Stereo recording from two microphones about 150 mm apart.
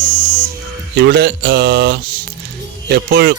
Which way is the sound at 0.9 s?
90° right.